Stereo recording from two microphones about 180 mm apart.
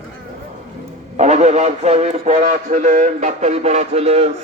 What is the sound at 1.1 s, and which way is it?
Speech, 40° right (ahead or behind).